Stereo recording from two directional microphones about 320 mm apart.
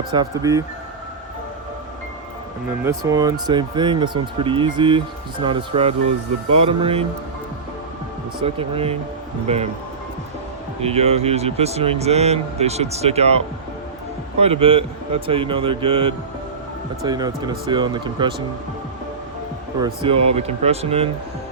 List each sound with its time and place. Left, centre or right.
0.1 s speech: centre
2.8 s speech: centre
8.4 s speech: centre
10.8 s speech: centre
19.8 s speech: centre